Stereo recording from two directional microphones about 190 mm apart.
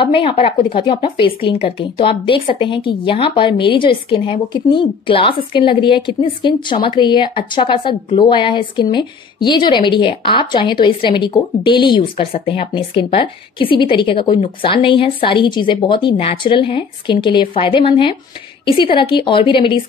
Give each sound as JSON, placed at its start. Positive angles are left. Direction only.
{"t": 0.0, "sound": "a woman's voice", "side_deg": 30}